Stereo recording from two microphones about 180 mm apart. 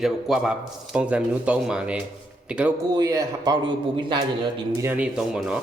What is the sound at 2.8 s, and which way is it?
A man's voice, 20° right (ahead or behind).